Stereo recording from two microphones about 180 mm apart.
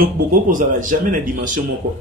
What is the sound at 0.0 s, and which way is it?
Speech, 50° right (ahead or behind).